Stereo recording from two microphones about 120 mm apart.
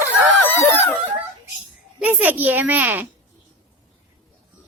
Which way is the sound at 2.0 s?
15° right (ahead or behind).